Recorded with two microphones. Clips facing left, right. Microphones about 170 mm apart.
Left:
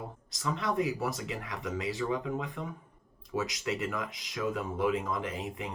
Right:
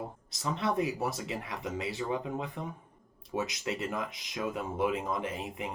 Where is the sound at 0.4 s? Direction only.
20° right (ahead or behind).